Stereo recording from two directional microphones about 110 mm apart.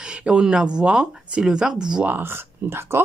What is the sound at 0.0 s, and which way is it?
Speech, 10° right (ahead or behind).